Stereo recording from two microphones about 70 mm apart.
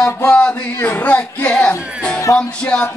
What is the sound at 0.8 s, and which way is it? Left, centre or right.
Speech, left.